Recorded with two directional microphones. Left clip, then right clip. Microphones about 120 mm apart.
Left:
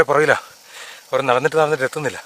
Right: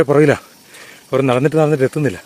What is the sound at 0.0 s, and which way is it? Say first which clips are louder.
Speech: right 2 dB; 25° left (ahead or behind).